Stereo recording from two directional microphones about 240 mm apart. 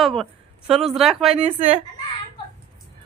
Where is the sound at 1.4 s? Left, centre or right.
Right.